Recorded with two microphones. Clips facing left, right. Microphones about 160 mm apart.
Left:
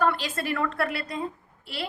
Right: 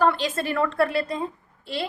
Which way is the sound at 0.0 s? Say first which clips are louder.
Right 4 dB; 25° right (ahead or behind).